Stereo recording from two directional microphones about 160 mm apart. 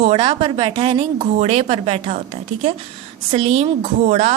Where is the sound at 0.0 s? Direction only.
40° right (ahead or behind).